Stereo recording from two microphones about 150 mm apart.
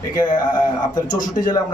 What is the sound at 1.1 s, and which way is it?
Speech, 60° left (ahead or behind).